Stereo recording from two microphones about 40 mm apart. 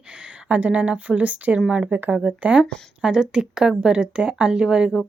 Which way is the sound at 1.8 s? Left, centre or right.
Right.